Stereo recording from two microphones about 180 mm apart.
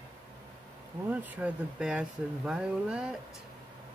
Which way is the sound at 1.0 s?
10° right (ahead or behind).